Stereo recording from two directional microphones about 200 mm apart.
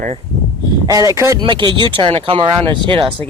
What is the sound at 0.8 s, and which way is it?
Speech, 15° right (ahead or behind).